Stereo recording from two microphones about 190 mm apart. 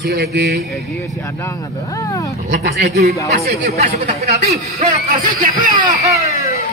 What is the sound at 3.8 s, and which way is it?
Speech, 35° right (ahead or behind).